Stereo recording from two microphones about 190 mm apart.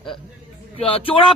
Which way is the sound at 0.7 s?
30° left (ahead or behind).